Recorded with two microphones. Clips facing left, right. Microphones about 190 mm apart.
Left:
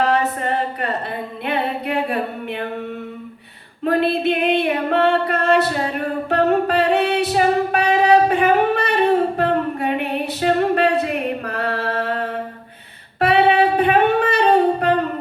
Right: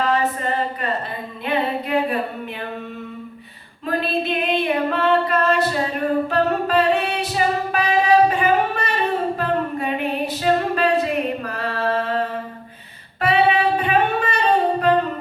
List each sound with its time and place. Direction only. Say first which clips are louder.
0.0 s a sound: left 2 dB; 65° left (ahead or behind)
3.8 s music: left 5 dB; 65° left (ahead or behind)
13.1 s singing: left 3 dB; 60° left (ahead or behind)